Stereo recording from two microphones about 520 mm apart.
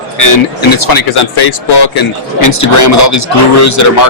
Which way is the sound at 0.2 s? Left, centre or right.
Left.